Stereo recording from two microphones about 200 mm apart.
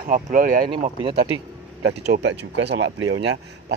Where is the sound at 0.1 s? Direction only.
45° right (ahead or behind).